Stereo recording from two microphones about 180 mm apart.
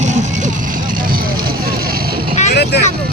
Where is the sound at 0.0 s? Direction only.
40° right (ahead or behind).